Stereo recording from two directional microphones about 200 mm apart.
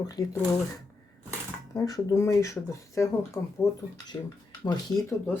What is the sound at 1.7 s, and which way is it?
Speech, 20° left (ahead or behind).